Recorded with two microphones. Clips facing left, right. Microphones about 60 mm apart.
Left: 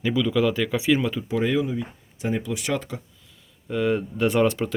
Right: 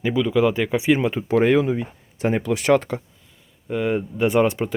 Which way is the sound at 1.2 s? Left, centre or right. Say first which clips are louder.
Right 6 dB; right.